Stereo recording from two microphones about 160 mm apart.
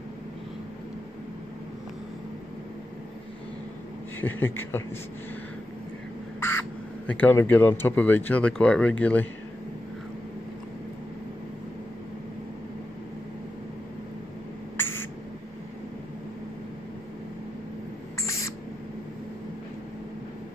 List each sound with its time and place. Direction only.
4.2 s speech: 10° left (ahead or behind)
7.1 s speech: 10° left (ahead or behind)
14.8 s a sound: 15° left (ahead or behind)
18.2 s owl: 20° left (ahead or behind)